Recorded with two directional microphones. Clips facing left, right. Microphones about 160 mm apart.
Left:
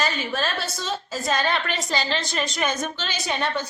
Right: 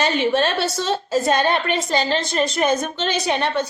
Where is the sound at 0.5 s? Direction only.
75° right (ahead or behind).